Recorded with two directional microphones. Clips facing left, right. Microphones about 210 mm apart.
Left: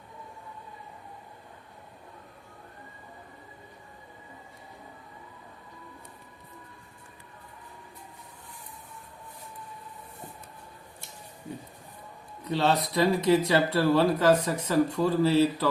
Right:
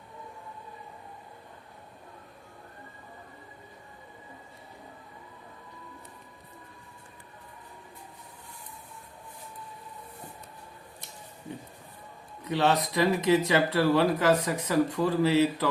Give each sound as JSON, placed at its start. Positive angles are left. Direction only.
{"t": 12.5, "sound": "speech", "side_deg": -15}